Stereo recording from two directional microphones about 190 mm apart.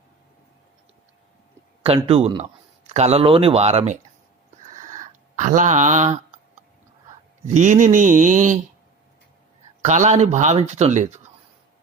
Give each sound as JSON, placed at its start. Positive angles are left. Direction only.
{"t": 2.0, "sound": "a man's voice", "side_deg": -30}
{"t": 4.8, "sound": "a sound", "side_deg": -40}
{"t": 7.4, "sound": "speech", "side_deg": -40}
{"t": 9.8, "sound": "speech", "side_deg": -35}